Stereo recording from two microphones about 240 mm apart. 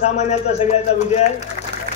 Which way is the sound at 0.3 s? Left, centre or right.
Left.